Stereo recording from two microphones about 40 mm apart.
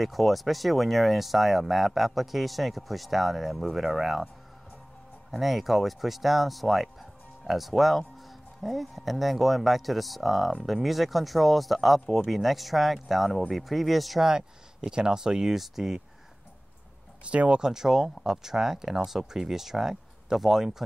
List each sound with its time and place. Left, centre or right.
0.0 s speech: centre
5.3 s speech: centre
14.2 s speech: centre
17.3 s speech: right
17.6 s speech: centre